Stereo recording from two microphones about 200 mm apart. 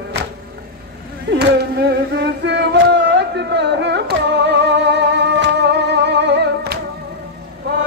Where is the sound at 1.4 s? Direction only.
55° right (ahead or behind).